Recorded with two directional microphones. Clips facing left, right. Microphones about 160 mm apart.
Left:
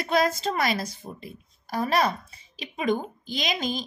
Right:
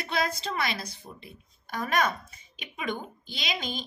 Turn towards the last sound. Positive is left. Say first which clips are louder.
# left 6 dB
turn(degrees=45)  # may be behind; listen again after turning